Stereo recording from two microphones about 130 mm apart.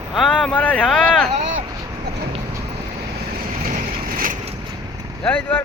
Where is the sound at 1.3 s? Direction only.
65° right (ahead or behind).